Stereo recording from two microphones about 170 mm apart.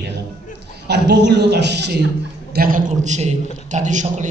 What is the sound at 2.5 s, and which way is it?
A man's voice, 55° right (ahead or behind).